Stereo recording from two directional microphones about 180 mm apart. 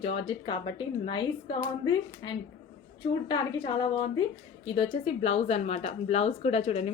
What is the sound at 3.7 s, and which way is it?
A woman's voice, 25° left (ahead or behind).